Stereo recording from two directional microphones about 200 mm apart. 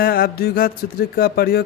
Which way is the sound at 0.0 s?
50° left (ahead or behind).